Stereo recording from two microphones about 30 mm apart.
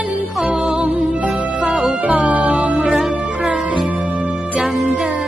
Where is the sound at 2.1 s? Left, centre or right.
Right.